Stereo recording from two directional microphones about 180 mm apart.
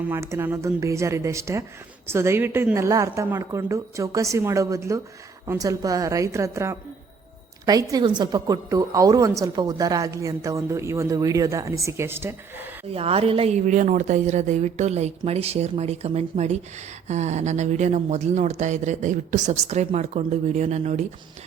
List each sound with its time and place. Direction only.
0.1 s a woman's voice: 15° right (ahead or behind)
12.9 s speech: 35° right (ahead or behind)